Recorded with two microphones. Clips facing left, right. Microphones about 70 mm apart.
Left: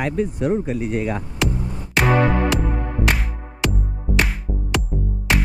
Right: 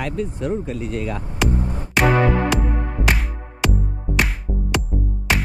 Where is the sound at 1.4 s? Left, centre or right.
Centre.